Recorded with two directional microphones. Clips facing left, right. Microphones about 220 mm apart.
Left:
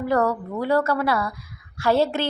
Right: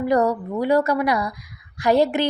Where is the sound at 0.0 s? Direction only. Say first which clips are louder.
Right 2 dB; 15° right (ahead or behind).